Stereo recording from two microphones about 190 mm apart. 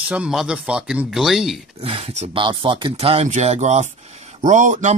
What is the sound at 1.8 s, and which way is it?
Speech, 30° right (ahead or behind).